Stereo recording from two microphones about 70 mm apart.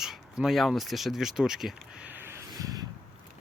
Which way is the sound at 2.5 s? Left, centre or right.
Right.